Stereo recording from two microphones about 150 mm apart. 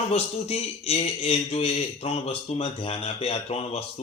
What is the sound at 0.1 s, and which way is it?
A man's voice, 45° left (ahead or behind).